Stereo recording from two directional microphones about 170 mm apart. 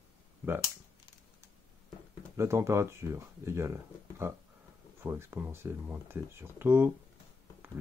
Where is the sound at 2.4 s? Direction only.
15° right (ahead or behind).